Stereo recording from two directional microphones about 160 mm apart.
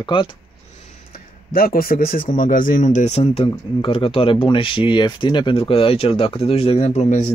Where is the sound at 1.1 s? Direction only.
65° left (ahead or behind); by 7.2 s 45° left (ahead or behind).